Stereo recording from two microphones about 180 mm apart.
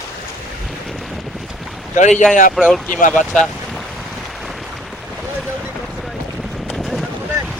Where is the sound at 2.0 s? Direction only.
40° left (ahead or behind).